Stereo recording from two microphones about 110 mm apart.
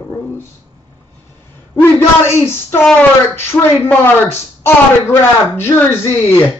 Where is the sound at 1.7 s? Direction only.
20° left (ahead or behind).